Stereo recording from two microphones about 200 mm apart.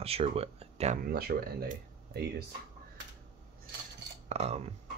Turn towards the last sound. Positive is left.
turn(degrees=-30)  # may be behind; listen again after turning